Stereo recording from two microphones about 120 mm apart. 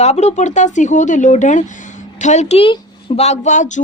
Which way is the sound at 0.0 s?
65° left (ahead or behind).